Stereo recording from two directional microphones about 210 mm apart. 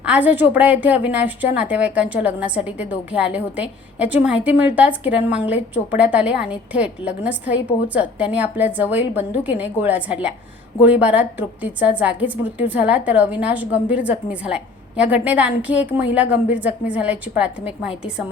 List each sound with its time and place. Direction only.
0.0 s a woman's voice: 5° right (ahead or behind)